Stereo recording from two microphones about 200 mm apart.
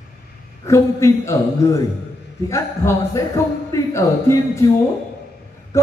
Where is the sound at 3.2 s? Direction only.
15° left (ahead or behind).